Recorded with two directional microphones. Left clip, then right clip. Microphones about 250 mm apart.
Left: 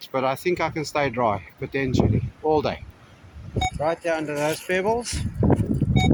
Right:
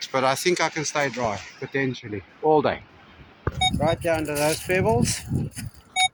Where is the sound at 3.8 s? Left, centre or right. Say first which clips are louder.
Right 1 dB; centre.